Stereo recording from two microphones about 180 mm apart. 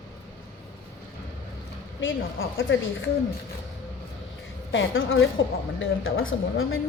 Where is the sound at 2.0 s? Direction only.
90° left.